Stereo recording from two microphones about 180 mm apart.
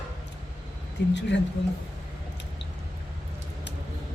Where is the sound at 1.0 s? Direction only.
75° left (ahead or behind).